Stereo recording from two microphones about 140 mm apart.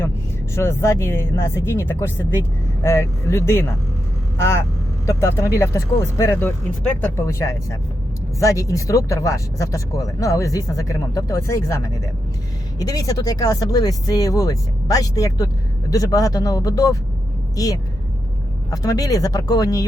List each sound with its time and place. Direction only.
0.5 s speech: 20° left (ahead or behind)
5.0 s speech: 20° left (ahead or behind)
18.7 s speech: 25° left (ahead or behind)